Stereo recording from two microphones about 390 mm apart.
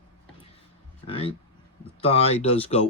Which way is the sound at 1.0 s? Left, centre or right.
Centre.